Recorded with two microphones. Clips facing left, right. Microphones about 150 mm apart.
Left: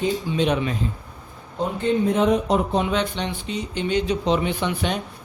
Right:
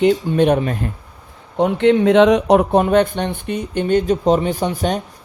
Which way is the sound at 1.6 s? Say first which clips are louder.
Right 8 dB; 85° right.